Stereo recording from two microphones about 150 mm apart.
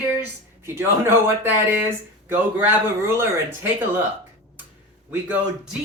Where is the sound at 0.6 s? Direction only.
15° right (ahead or behind).